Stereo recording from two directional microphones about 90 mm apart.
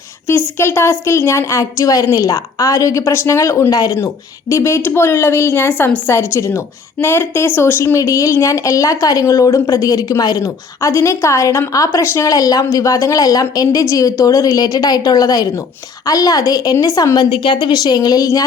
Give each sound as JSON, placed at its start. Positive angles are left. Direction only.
{"t": 0.3, "sound": "a woman's voice", "side_deg": 25}
{"t": 17.3, "sound": "a woman's voice", "side_deg": 70}